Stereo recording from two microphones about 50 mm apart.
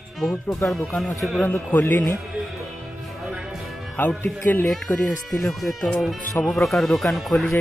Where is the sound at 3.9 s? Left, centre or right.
Left.